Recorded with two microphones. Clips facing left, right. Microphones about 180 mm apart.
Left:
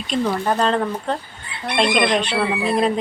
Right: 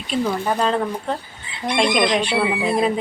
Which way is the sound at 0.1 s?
5° right (ahead or behind).